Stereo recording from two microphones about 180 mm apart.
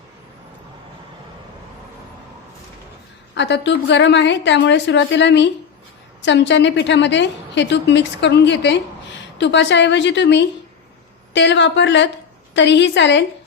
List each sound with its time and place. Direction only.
3.3 s a woman's voice: 75° left (ahead or behind)